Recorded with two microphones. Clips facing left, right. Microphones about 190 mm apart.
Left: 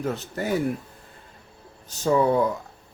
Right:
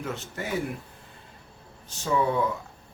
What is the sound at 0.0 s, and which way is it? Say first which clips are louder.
Speech: left 5 dB; 35° left (ahead or behind).